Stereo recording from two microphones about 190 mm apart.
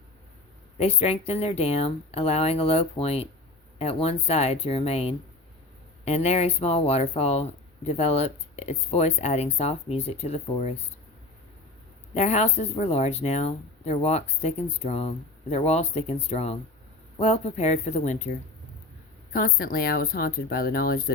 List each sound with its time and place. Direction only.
0.8 s speech: 35° left (ahead or behind)
12.1 s speech: 35° left (ahead or behind)
19.3 s speech: 50° left (ahead or behind)